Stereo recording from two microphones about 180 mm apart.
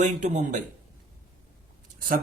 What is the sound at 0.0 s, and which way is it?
Speech, 45° right (ahead or behind).